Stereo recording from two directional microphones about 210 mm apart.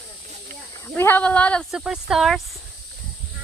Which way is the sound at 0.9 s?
10° left (ahead or behind).